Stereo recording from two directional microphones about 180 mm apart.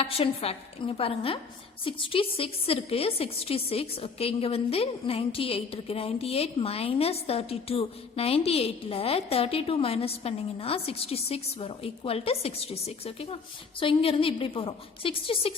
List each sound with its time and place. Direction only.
0.0 s a woman's voice: 35° left (ahead or behind)